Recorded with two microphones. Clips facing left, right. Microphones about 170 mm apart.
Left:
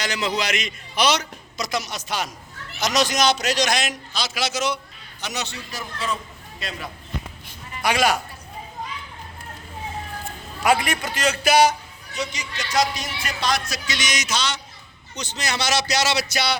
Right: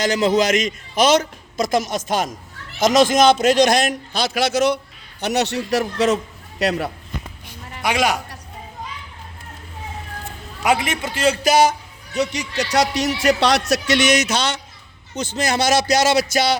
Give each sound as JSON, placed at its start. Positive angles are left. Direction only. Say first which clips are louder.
{"t": 0.0, "sound": "a man's voice", "louder": "right 8 dB", "side_deg": -45}
{"t": 7.8, "sound": "a man's voice", "louder": "right 1 dB", "side_deg": 0}
{"t": 10.6, "sound": "a man's voice", "louder": "right 1 dB", "side_deg": -20}
{"t": 12.1, "sound": "a man's voice", "louder": "right 8 dB", "side_deg": -65}